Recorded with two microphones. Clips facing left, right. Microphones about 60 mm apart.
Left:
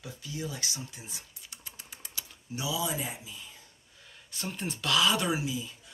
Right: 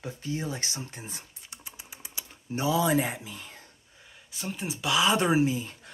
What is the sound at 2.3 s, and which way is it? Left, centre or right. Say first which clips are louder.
Speech: right 7 dB; right.